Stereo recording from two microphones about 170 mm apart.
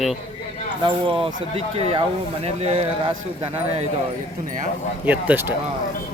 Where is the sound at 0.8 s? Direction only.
30° right (ahead or behind).